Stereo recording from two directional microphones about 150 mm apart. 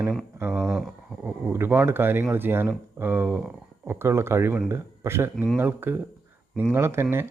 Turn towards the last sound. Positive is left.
turn(degrees=-15)  # may be behind; listen again after turning